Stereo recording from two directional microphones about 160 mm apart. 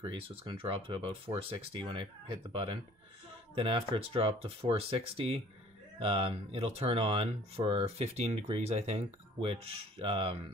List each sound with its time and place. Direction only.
0.0 s speech: 30° right (ahead or behind)
3.5 s speech: 35° right (ahead or behind)